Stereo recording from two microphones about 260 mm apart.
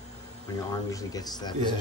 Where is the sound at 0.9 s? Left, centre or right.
Centre.